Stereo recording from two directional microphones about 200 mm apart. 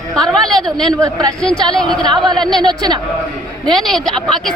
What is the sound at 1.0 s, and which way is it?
Speech, 15° right (ahead or behind).